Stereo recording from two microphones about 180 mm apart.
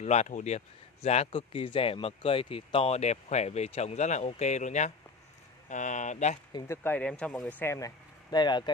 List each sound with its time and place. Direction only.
0.0 s speech: 40° left (ahead or behind)
6.5 s speech: 15° left (ahead or behind)